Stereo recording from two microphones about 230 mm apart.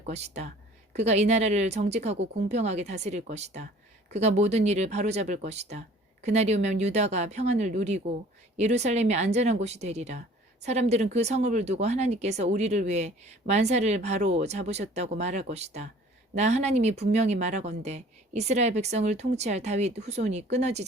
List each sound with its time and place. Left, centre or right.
0.0 s speech: right